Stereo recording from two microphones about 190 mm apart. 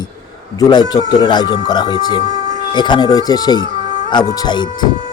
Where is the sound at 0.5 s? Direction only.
20° left (ahead or behind).